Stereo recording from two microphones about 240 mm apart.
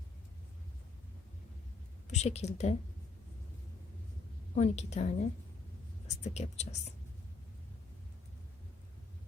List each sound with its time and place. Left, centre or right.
2.0 s speech: left
4.5 s speech: left
6.2 s speech: left